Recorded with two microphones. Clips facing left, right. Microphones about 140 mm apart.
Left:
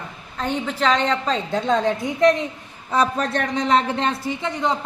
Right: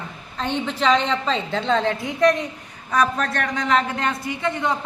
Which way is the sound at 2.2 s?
20° left (ahead or behind).